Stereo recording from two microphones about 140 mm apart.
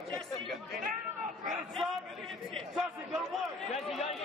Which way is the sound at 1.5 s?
Centre (ahead or behind).